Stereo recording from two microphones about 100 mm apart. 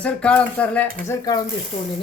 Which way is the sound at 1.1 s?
40° left (ahead or behind).